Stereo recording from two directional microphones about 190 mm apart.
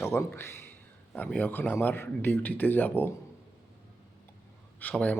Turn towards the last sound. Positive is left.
turn(degrees=5)  # may be behind; listen again after turning